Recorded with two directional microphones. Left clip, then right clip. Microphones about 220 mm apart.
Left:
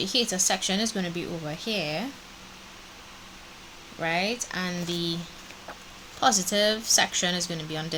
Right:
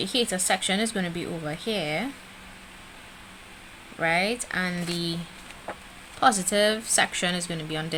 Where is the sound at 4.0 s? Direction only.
20° right (ahead or behind).